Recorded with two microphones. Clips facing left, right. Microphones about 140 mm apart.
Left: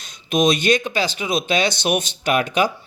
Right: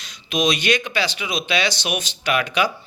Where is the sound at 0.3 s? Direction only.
50° left (ahead or behind).